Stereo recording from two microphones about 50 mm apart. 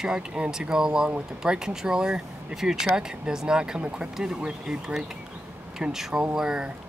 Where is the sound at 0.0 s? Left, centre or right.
Centre.